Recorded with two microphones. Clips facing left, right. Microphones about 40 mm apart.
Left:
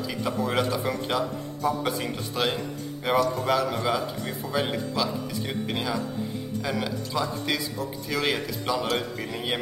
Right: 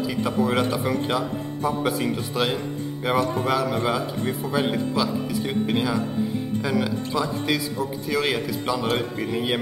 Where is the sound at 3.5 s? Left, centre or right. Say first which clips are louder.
Right 2 dB; centre.